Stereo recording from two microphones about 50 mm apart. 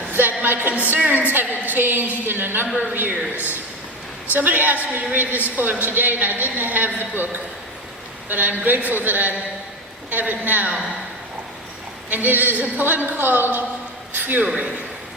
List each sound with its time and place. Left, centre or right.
0.1 s a sound: right
0.9 s a woman's voice: right
4.3 s a woman's voice: right
12.1 s a woman's voice: right
14.4 s a man's voice: right